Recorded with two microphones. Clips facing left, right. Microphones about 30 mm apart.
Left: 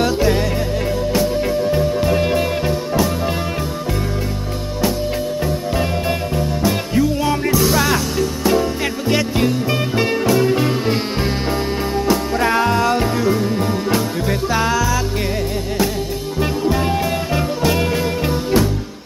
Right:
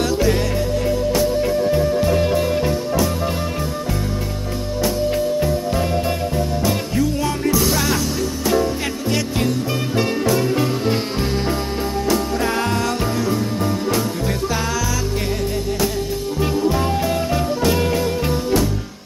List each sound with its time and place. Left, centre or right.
2.0 s music: centre
6.7 s music: centre
12.5 s music: centre
16.3 s music: centre